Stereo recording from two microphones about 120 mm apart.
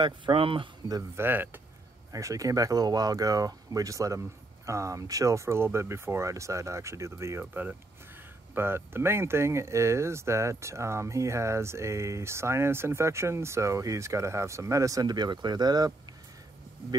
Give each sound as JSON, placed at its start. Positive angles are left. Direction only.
{"t": 0.0, "sound": "speech", "side_deg": -45}
{"t": 0.8, "sound": "a man's voice", "side_deg": -30}
{"t": 1.2, "sound": "speech", "side_deg": -15}
{"t": 2.1, "sound": "speech", "side_deg": -30}